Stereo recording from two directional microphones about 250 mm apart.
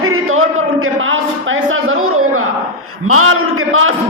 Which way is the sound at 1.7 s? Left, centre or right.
Right.